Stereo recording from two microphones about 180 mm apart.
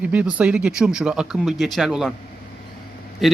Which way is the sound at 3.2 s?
Centre (ahead or behind).